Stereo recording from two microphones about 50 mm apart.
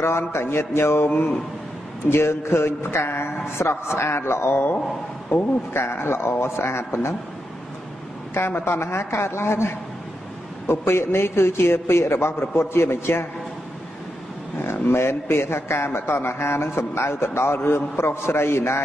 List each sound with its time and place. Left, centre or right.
0.3 s a man's voice: left
8.4 s a man's voice: left
14.6 s a man's voice: left